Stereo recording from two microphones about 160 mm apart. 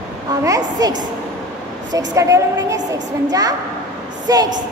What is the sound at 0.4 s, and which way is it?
A woman's voice, 20° right (ahead or behind).